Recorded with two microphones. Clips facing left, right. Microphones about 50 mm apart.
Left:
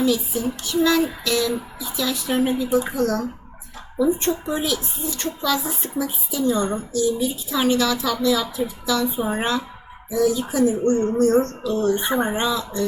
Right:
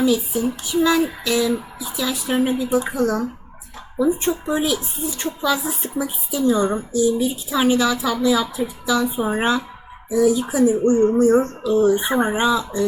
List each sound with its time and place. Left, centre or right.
0.9 s a woman's voice: centre